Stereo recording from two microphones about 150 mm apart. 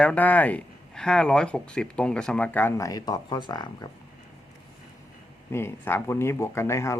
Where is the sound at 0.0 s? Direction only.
10° left (ahead or behind); by 3.8 s 30° left (ahead or behind).